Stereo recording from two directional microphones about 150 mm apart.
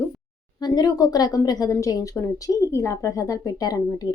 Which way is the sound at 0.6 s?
25° left (ahead or behind).